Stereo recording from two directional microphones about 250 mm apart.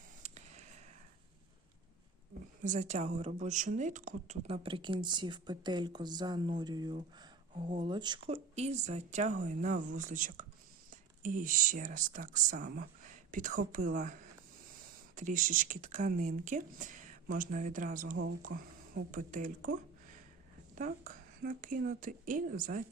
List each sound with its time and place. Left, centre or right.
0.2 s a sound: right
2.6 s a woman's voice: right
20.7 s speech: right